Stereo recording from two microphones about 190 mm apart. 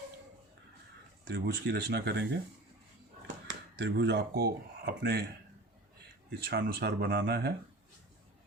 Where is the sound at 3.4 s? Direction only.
70° right (ahead or behind).